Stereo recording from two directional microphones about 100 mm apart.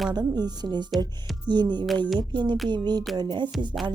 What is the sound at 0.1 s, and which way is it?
Speech, 45° right (ahead or behind).